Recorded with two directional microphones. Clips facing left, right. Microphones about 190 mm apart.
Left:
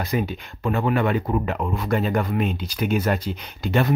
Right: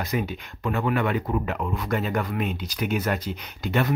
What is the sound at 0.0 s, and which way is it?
Speech, 30° left (ahead or behind).